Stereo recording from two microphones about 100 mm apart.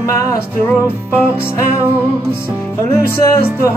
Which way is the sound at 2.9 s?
30° left (ahead or behind).